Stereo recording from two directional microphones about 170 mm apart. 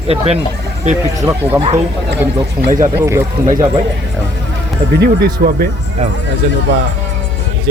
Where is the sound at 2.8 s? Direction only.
15° right (ahead or behind).